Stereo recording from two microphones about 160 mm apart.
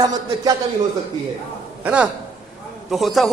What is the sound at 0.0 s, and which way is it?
Speech, 25° right (ahead or behind).